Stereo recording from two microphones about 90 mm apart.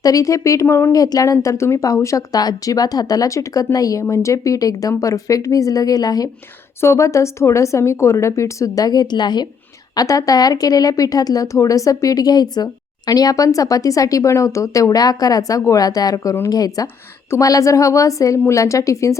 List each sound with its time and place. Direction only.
0.0 s a woman's voice: 40° left (ahead or behind)
0.9 s a woman's voice: 45° left (ahead or behind)
6.8 s a woman's voice: 30° left (ahead or behind); by 9.5 s 55° left (ahead or behind)
9.9 s a woman's voice: 40° left (ahead or behind)